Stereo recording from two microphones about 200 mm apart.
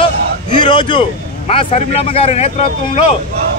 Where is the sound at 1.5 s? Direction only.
30° left (ahead or behind).